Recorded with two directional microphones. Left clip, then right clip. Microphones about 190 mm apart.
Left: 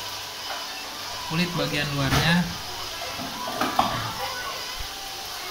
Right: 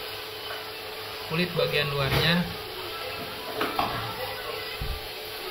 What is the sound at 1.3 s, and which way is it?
Speech, 30° right (ahead or behind).